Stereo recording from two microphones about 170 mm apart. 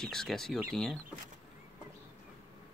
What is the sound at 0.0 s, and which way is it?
Speech, centre (ahead or behind).